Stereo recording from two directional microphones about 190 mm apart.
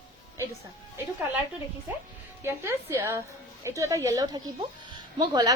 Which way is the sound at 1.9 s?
10° right (ahead or behind).